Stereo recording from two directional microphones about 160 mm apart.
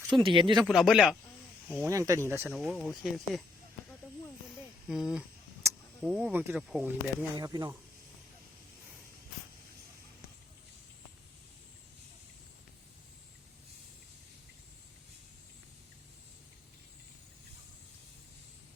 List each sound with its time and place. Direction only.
0.1 s speech: 30° right (ahead or behind)
0.6 s speech: centre (ahead or behind)
1.9 s speech: 20° right (ahead or behind)
2.5 s speech: centre (ahead or behind)
4.9 s speech: 5° right (ahead or behind)
5.6 s a sound: 15° right (ahead or behind)
6.0 s speech: 5° right (ahead or behind)
7.3 s speech: 25° right (ahead or behind)